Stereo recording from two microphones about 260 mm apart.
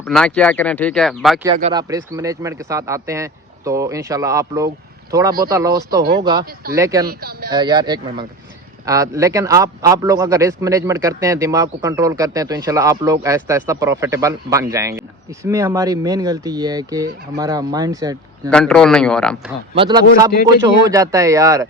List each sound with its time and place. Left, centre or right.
0.0 s speech: centre
1.7 s a man's voice: centre
7.1 s speech: right
7.5 s a man's voice: centre
18.5 s speech: centre
19.7 s a man's voice: centre